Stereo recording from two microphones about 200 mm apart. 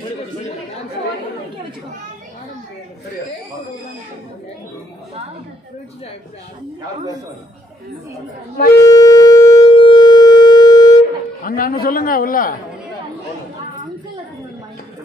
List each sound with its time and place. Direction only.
8.7 s shofar: 15° left (ahead or behind)
11.4 s a man's voice: 45° left (ahead or behind)